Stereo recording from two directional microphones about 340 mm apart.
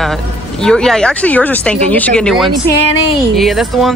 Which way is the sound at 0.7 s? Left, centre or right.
Centre.